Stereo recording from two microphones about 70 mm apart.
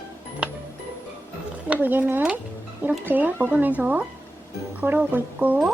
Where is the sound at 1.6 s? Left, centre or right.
Right.